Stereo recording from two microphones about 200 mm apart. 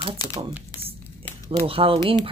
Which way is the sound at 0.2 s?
20° left (ahead or behind).